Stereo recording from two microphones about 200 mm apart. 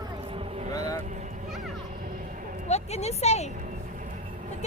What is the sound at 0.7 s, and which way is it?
Vehicle, 15° left (ahead or behind).